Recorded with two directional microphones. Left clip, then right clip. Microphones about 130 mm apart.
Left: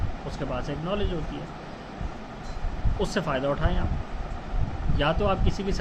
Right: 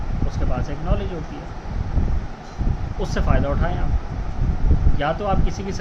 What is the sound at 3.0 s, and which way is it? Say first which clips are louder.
Speech: right 2 dB; 25° left (ahead or behind).